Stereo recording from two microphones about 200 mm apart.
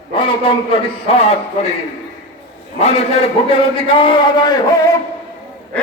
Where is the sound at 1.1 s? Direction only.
30° left (ahead or behind).